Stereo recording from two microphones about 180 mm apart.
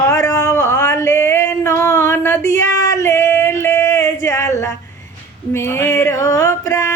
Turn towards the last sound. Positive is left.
turn(degrees=15)  # may be behind; listen again after turning